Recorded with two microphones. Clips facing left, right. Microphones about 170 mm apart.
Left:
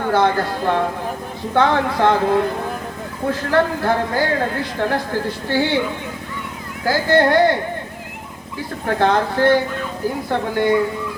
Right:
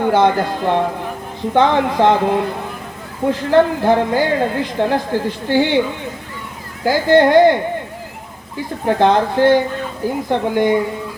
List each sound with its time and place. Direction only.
0.0 s speech: 20° right (ahead or behind)
6.8 s speech: 20° right (ahead or behind)
8.9 s speech: 20° right (ahead or behind)